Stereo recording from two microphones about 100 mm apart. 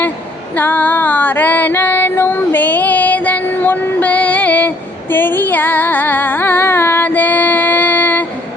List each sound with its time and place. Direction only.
0.5 s female singing: 20° left (ahead or behind)